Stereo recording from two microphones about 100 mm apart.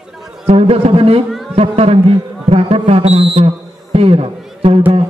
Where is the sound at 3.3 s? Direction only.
85° right; by 4.8 s 65° right (ahead or behind).